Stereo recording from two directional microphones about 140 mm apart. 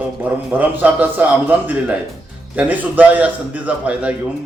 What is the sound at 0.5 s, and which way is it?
A man's voice, 10° right (ahead or behind).